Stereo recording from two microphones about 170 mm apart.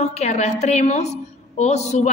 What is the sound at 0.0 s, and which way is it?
A woman's voice, 40° left (ahead or behind).